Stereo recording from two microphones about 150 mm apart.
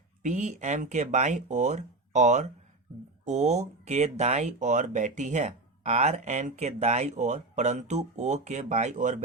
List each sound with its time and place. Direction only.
0.2 s speech: 55° right (ahead or behind)